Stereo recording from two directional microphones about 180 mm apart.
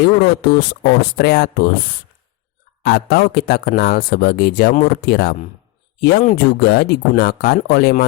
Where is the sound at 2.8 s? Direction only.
60° left (ahead or behind).